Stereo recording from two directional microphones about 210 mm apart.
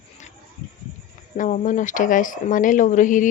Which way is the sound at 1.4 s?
35° left (ahead or behind).